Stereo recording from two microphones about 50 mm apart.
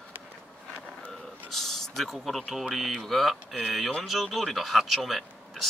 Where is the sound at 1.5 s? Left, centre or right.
Centre.